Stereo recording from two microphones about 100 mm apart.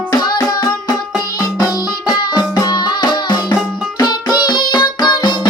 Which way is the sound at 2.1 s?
40° left (ahead or behind).